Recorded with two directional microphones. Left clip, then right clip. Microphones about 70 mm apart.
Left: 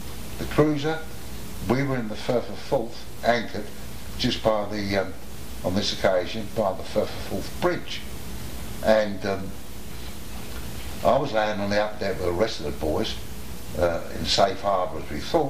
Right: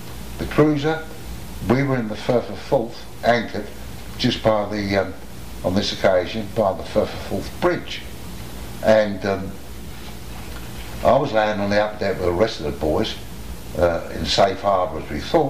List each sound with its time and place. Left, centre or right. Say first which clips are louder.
0.4 s speech: right 4 dB; left
11.0 s speech: right 5 dB; left